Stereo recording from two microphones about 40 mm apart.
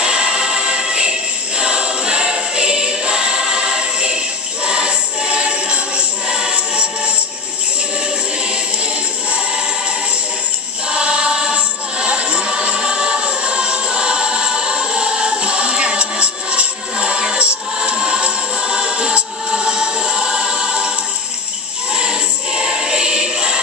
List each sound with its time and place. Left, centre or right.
0.0 s music: right
1.6 s choir: right
4.6 s music: right
10.9 s music: right
21.9 s choir: right